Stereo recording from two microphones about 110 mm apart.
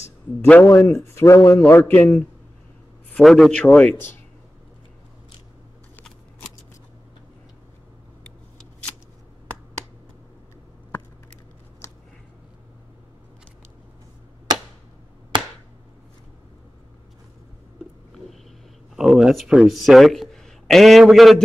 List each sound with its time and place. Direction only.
0.4 s a man's voice: 15° left (ahead or behind)
0.8 s speech: 25° left (ahead or behind)
3.2 s a man's voice: centre (ahead or behind)
3.6 s a man's voice: 15° left (ahead or behind)
18.9 s speech: 5° right (ahead or behind)